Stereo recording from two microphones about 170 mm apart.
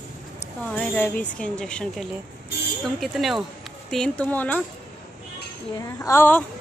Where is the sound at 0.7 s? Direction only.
10° left (ahead or behind).